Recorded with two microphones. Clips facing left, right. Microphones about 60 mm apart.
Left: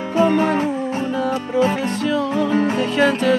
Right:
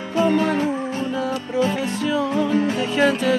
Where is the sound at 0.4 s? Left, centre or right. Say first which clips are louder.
Left 2 dB; left.